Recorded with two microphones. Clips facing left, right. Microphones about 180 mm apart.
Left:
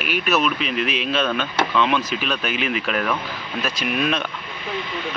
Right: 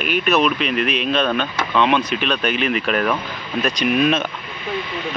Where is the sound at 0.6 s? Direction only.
60° right (ahead or behind).